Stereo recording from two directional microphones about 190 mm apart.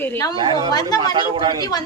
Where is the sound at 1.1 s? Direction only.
25° right (ahead or behind).